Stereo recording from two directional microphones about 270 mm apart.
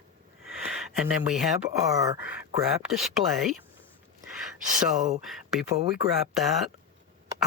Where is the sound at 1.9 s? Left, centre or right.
Centre.